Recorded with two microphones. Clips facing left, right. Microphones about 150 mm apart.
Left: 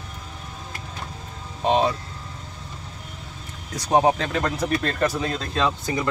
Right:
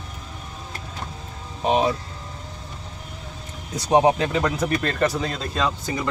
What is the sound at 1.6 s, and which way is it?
Speech, 10° right (ahead or behind).